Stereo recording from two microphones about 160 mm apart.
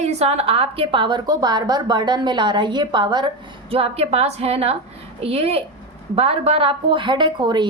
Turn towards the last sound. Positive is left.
turn(degrees=-30)  # may be behind; listen again after turning